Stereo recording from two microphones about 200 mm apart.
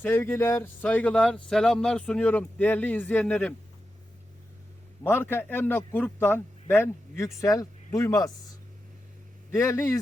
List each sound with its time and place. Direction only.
0.0 s speech: 10° left (ahead or behind)
5.0 s speech: 10° left (ahead or behind)
9.5 s speech: 15° left (ahead or behind)